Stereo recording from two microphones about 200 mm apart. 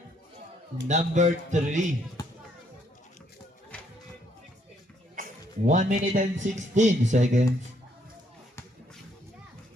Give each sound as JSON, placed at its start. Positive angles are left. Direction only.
{"t": 0.9, "sound": "music", "side_deg": -35}
{"t": 2.2, "sound": "a sound", "side_deg": 15}
{"t": 5.1, "sound": "a man's voice", "side_deg": -40}